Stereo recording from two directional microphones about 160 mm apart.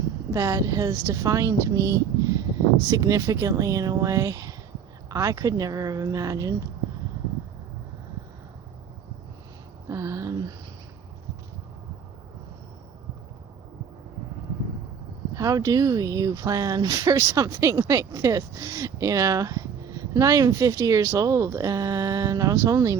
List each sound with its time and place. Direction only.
0.3 s speech: 20° right (ahead or behind)
9.9 s a sound: 20° right (ahead or behind)
15.4 s speech: 20° right (ahead or behind)